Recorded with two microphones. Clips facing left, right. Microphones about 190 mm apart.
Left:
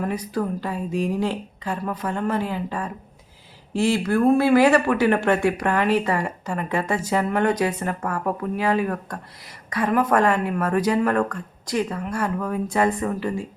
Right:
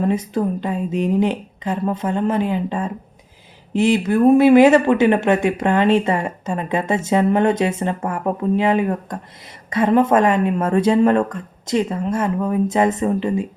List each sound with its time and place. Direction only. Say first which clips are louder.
0.0 s speech: right 6 dB; 25° right (ahead or behind)